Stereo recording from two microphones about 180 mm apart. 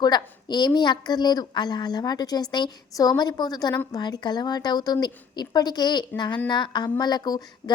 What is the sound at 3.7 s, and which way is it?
Speech, 10° left (ahead or behind).